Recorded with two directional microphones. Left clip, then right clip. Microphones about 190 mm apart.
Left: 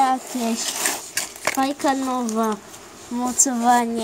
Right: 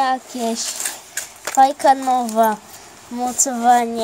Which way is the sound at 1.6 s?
25° right (ahead or behind).